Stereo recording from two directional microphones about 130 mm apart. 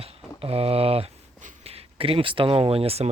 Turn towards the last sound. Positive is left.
turn(degrees=-50)  # may be behind; listen again after turning